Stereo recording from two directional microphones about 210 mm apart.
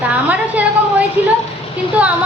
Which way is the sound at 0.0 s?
5° right (ahead or behind).